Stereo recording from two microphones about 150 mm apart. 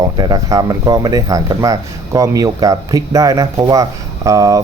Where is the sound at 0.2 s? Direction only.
25° right (ahead or behind).